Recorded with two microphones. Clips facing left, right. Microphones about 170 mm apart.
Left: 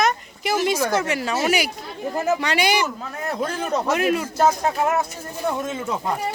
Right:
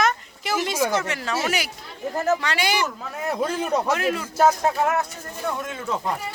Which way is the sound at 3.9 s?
15° left (ahead or behind).